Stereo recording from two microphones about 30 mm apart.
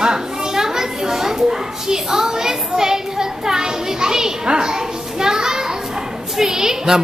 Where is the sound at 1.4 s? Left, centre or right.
Centre.